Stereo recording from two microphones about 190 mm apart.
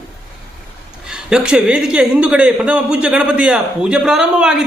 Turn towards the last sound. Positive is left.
turn(degrees=-5)  # may be behind; listen again after turning